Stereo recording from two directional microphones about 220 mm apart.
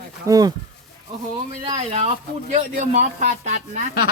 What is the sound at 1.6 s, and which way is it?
A man's voice, 30° right (ahead or behind).